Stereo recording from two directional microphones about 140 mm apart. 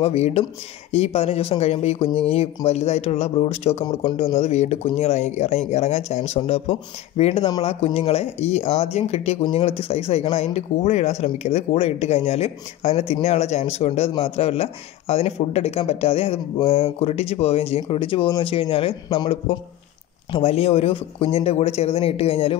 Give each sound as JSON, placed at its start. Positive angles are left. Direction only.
{"t": 0.0, "sound": "speech", "side_deg": 50}